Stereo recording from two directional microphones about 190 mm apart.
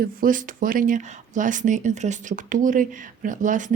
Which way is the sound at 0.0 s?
45° right (ahead or behind).